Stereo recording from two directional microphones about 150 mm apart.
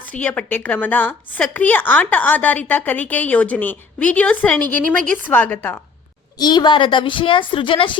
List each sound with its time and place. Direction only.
0.2 s a woman's voice: 10° left (ahead or behind)
6.4 s a woman's voice: 30° left (ahead or behind)